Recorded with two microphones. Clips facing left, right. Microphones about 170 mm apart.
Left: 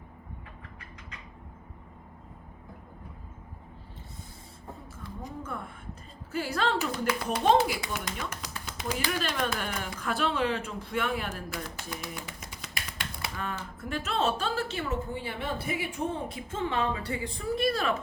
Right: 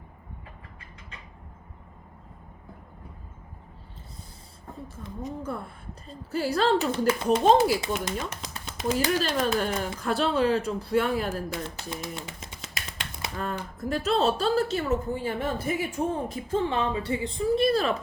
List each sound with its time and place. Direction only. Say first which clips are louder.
5.4 s a woman's voice: right 4 dB; 35° right (ahead or behind)
7.3 s a woman's voice: right 5 dB; 35° right (ahead or behind)
7.8 s speech: right 5 dB; 25° right (ahead or behind)
9.0 s a woman's voice: right 5 dB; 35° right (ahead or behind)
11.5 s a sound: right 4 dB; 25° right (ahead or behind)
13.3 s a woman's voice: right 7 dB; 35° right (ahead or behind)